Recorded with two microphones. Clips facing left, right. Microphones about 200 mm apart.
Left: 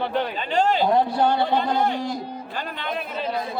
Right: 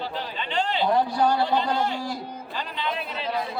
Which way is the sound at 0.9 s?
25° left (ahead or behind).